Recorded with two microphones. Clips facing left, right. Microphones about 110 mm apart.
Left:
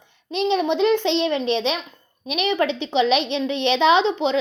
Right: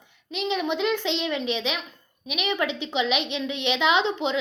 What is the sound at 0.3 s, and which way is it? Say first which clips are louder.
A woman's voice: left 6 dB; 30° left (ahead or behind).